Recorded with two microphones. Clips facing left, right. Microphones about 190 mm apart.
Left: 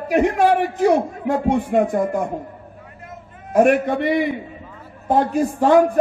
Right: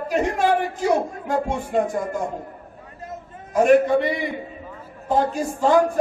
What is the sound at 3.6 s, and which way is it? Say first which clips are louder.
A man's voice: right 1 dB; 60° left (ahead or behind).